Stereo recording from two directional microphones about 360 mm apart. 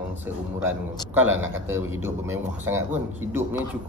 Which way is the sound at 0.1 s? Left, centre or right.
Centre.